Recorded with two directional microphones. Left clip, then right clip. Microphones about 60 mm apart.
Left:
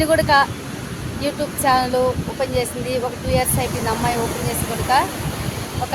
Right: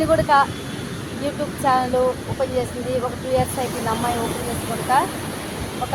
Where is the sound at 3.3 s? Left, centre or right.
Left.